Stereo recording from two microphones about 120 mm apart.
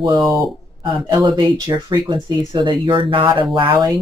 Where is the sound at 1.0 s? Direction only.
35° right (ahead or behind).